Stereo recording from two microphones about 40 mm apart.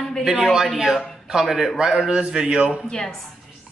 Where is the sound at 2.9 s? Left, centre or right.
Centre.